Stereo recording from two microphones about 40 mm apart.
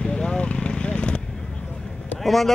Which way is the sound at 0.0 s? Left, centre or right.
Centre.